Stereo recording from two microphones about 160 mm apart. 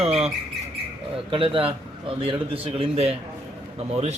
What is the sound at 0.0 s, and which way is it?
Rodents, 40° right (ahead or behind).